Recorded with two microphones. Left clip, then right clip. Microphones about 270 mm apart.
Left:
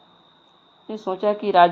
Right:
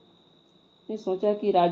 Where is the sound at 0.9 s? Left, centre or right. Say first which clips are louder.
Left 3 dB; centre.